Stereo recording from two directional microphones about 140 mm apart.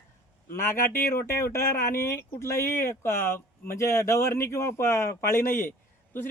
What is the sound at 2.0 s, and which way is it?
Speech, 20° left (ahead or behind).